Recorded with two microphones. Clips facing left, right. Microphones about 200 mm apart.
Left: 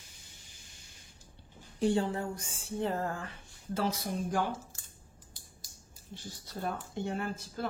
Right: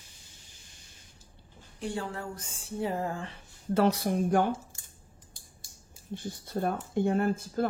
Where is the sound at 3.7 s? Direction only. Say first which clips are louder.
Right 8 dB; 65° right (ahead or behind).